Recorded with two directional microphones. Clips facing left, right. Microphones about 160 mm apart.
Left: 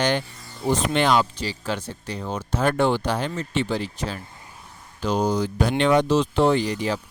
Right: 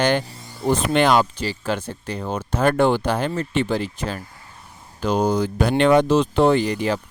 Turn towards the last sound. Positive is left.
turn(degrees=-55)  # may be behind; listen again after turning